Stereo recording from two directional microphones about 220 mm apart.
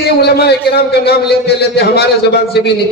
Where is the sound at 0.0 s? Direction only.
45° left (ahead or behind).